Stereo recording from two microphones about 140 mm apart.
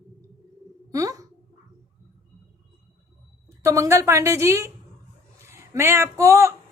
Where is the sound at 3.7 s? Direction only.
20° right (ahead or behind).